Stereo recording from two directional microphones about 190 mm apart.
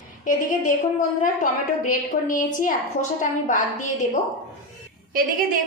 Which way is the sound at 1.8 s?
45° left (ahead or behind).